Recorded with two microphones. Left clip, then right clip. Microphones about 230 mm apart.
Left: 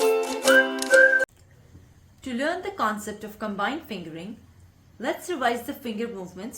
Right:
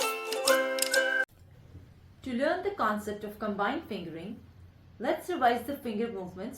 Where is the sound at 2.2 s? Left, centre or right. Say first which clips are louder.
Left 2 dB; left.